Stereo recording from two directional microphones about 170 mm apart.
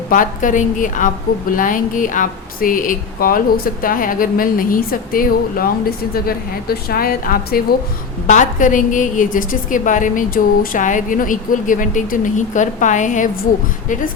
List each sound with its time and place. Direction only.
0.1 s a woman's voice: 50° left (ahead or behind)
8.3 s a woman's voice: 45° left (ahead or behind)